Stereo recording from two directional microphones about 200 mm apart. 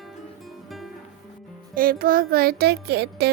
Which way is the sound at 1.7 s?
45° right (ahead or behind).